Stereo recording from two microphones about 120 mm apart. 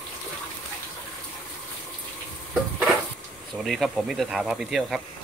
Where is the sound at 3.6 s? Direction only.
Centre (ahead or behind).